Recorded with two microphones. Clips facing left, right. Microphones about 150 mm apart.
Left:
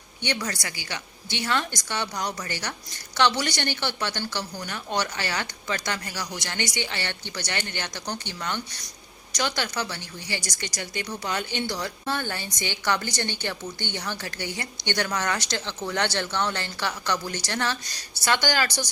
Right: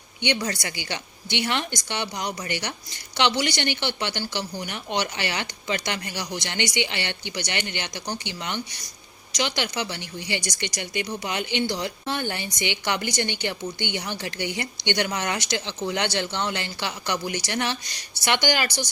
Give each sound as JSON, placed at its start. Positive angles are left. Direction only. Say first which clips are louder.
{"t": 0.2, "sound": "a woman's voice", "louder": "right 3 dB", "side_deg": -20}